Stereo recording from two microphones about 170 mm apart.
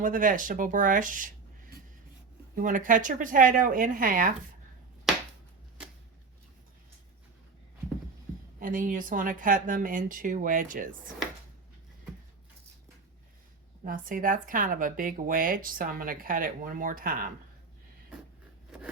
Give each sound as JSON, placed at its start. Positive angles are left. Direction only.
{"t": 0.0, "sound": "speech", "side_deg": -50}
{"t": 2.6, "sound": "speech", "side_deg": -50}
{"t": 8.5, "sound": "speech", "side_deg": -55}
{"t": 13.8, "sound": "speech", "side_deg": -55}